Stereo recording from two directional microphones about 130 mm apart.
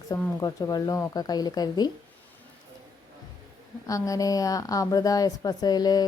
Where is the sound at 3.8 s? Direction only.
25° left (ahead or behind).